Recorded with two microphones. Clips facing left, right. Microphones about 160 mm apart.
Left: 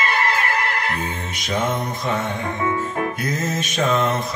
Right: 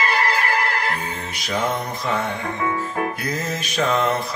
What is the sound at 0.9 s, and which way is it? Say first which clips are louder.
Music: left 2 dB; 25° left (ahead or behind).